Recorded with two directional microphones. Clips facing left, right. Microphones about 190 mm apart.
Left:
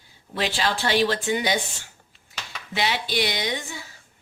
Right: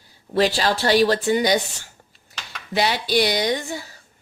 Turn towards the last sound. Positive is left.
turn(degrees=-40)  # may be behind; listen again after turning